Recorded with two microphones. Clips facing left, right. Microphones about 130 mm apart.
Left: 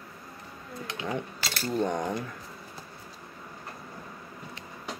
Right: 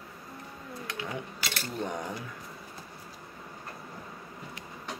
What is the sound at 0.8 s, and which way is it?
Speech, 25° left (ahead or behind).